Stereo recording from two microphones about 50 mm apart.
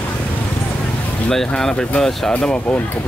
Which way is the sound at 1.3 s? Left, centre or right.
Centre.